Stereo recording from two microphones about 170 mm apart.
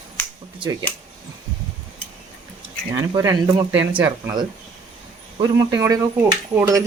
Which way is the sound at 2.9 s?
20° right (ahead or behind).